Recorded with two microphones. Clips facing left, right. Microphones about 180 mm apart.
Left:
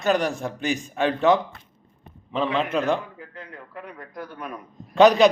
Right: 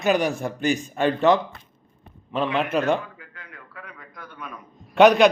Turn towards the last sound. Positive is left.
turn(degrees=0)  # may be behind; listen again after turning